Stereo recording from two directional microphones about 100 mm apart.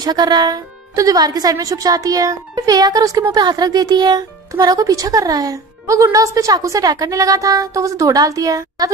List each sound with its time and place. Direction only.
0.0 s a woman's voice: 45° right (ahead or behind)